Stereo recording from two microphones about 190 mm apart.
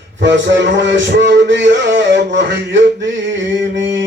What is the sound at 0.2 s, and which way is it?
Speech, 75° right (ahead or behind).